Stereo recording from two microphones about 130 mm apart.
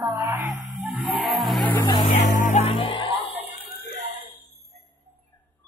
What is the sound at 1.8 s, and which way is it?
Speech, 35° left (ahead or behind).